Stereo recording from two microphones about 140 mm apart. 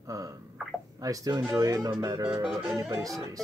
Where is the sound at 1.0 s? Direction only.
25° right (ahead or behind).